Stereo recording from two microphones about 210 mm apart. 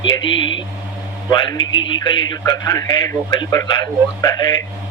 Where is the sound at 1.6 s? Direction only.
65° left (ahead or behind).